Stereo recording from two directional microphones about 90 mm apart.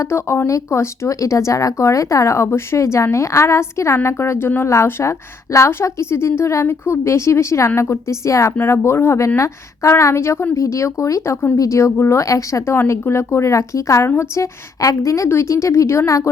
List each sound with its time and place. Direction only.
0.0 s speech: 30° left (ahead or behind)